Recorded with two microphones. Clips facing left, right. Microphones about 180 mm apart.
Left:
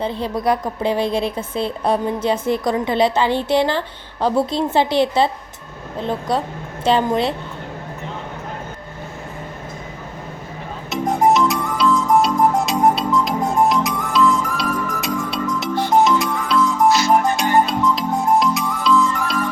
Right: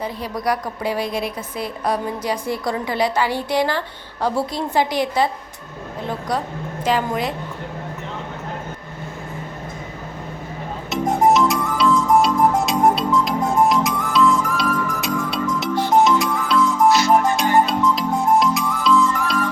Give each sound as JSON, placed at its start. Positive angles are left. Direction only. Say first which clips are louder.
{"t": 0.0, "sound": "a woman's voice", "louder": "left 4 dB", "side_deg": 25}
{"t": 10.8, "sound": "music", "louder": "even", "side_deg": 0}